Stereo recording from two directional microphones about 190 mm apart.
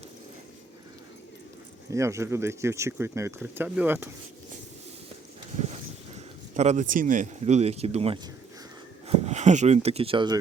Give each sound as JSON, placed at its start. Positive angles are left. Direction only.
{"t": 1.9, "sound": "speech", "side_deg": -15}
{"t": 5.5, "sound": "speech", "side_deg": -35}